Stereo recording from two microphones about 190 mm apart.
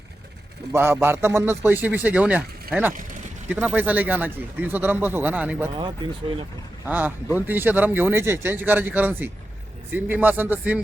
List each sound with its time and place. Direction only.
0.7 s speech: 10° right (ahead or behind)
5.7 s speech: 25° right (ahead or behind)
6.8 s speech: 10° right (ahead or behind)